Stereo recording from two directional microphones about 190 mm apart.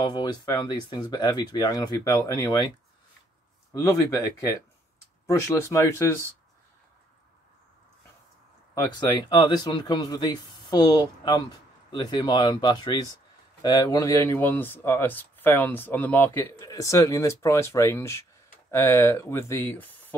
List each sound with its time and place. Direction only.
0.0 s speech: 20° left (ahead or behind)
5.2 s a man's voice: 15° left (ahead or behind)
8.7 s a man's voice: 20° left (ahead or behind)